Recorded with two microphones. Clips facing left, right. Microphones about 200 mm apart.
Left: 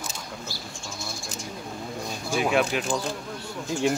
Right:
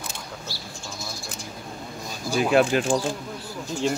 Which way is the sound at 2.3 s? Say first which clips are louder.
Right 2 dB; centre (ahead or behind).